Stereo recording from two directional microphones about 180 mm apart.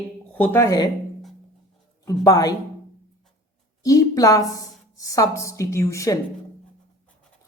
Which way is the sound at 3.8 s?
20° left (ahead or behind).